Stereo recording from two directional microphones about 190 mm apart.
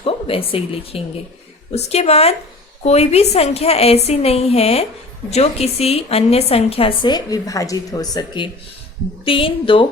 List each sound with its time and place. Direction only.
0.0 s a woman's voice: 30° left (ahead or behind)